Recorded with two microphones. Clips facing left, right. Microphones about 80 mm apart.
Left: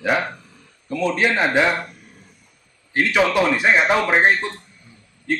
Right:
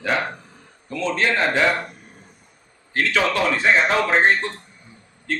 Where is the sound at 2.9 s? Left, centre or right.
Centre.